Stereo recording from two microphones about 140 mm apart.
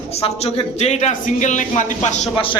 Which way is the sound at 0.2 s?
45° left (ahead or behind).